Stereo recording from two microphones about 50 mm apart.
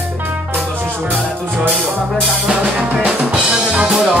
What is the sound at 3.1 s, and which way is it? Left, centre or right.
Drum kit, right.